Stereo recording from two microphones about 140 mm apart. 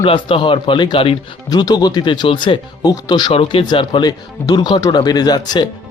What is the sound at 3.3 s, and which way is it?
A man's voice, 40° left (ahead or behind).